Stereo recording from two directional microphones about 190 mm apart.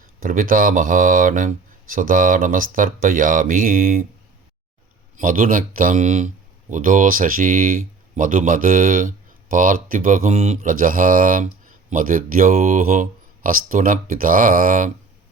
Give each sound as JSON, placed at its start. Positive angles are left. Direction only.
{"t": 0.2, "sound": "speech", "side_deg": -50}
{"t": 5.1, "sound": "speech", "side_deg": -45}